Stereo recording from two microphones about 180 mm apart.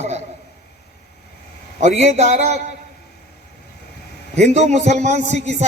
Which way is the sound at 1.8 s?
40° right (ahead or behind).